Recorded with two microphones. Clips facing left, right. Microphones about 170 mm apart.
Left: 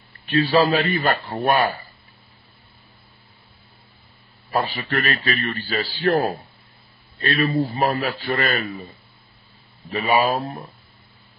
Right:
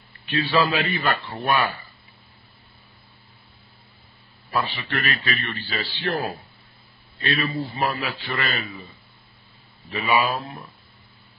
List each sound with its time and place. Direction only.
0.3 s a man's voice: 40° left (ahead or behind)
4.5 s a man's voice: 40° left (ahead or behind)